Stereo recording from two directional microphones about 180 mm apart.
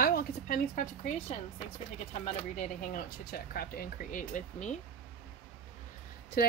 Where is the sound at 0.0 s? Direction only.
60° left (ahead or behind).